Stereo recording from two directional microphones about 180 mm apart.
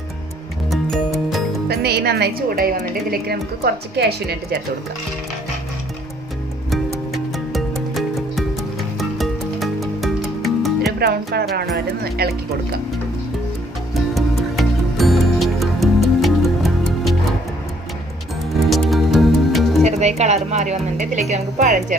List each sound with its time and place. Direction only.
0.7 s music: centre (ahead or behind)
1.7 s a woman's voice: 60° right (ahead or behind)
7.3 s music: centre (ahead or behind)
11.0 s a woman's voice: 60° right (ahead or behind)
13.9 s music: centre (ahead or behind)
18.5 s music: centre (ahead or behind)
19.8 s a woman's voice: 40° right (ahead or behind)